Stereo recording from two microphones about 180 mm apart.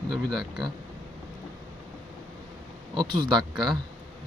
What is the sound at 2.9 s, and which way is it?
Speech, 25° right (ahead or behind).